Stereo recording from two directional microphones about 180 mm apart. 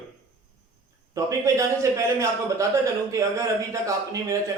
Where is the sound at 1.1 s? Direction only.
15° right (ahead or behind).